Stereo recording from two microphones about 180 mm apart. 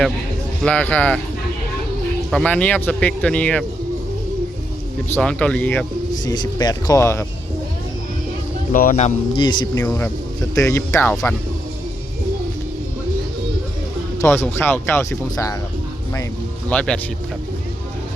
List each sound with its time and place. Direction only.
0.6 s speech: 10° left (ahead or behind)
2.3 s speech: 5° left (ahead or behind)
5.0 s speech: 10° left (ahead or behind)
6.2 s speech: 20° left (ahead or behind)
8.7 s speech: 50° left (ahead or behind)
9.4 s speech: 25° left (ahead or behind)
9.8 s speech: 15° left (ahead or behind)
14.2 s speech: 10° left (ahead or behind)
16.6 s speech: 5° left (ahead or behind)